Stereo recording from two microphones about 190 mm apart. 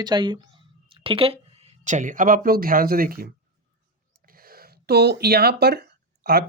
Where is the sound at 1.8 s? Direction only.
40° right (ahead or behind).